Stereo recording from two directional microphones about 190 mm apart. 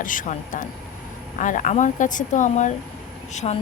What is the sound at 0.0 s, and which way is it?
Speech, 45° left (ahead or behind).